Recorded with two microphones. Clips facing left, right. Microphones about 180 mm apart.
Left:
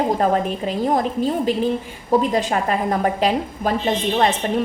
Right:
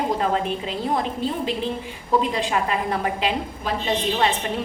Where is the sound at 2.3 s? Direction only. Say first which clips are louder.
Left 3 dB; 45° left (ahead or behind).